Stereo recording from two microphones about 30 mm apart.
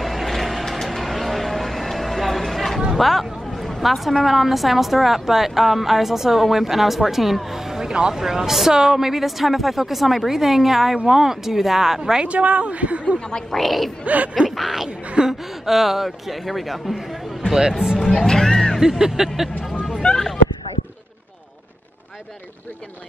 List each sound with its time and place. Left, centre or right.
0.0 s vehicle: centre
0.7 s a sound: centre
3.8 s a man's voice: centre
12.3 s speech: right
13.5 s a man's voice: centre
14.0 s speech: right
14.5 s a man's voice: centre
15.2 s speech: right
15.6 s a man's voice: centre
18.2 s speech: centre
18.8 s a woman's voice: centre
20.0 s speech: left